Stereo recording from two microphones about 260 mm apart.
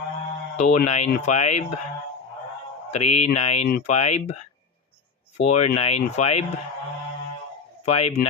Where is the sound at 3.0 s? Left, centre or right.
Left.